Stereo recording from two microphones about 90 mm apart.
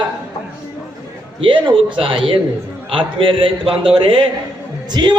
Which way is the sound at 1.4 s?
65° right (ahead or behind).